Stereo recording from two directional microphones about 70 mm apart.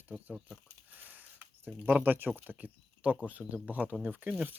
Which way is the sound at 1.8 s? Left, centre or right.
Right.